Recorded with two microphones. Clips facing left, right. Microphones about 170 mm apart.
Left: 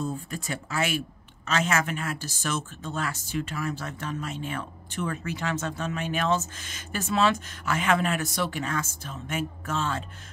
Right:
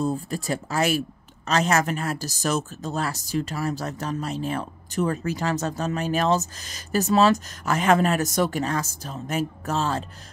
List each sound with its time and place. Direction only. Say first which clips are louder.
0.0 s speech: right 6 dB; 35° right (ahead or behind)